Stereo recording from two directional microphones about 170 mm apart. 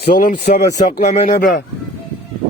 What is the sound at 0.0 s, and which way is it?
Speech, 50° left (ahead or behind).